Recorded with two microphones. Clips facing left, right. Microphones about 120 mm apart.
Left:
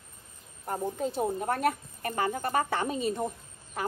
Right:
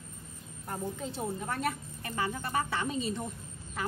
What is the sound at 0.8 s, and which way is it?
A woman's voice, 50° left (ahead or behind).